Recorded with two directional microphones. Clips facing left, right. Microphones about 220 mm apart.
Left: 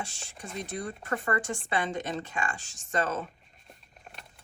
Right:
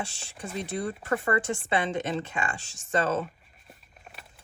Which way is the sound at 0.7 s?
30° right (ahead or behind).